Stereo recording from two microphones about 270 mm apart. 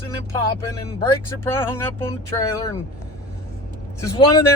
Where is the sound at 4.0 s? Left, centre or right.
Centre.